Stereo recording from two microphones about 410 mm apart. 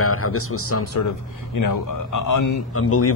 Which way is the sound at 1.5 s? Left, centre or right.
Left.